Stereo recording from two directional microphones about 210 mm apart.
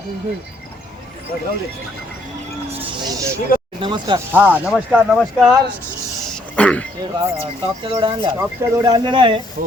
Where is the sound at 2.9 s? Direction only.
20° right (ahead or behind).